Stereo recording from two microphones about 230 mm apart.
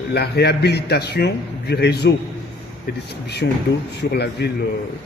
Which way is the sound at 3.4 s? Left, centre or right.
Left.